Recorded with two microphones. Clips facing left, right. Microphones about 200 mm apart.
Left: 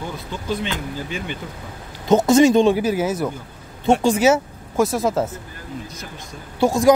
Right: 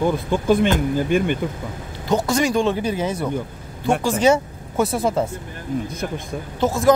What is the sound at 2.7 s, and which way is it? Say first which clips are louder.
Speech: left 3 dB; 5° left (ahead or behind).